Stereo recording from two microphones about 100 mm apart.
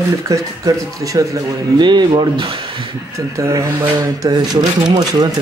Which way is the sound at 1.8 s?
50° right (ahead or behind).